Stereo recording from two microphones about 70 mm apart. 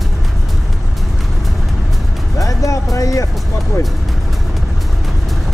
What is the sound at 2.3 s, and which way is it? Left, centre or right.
Speech, left.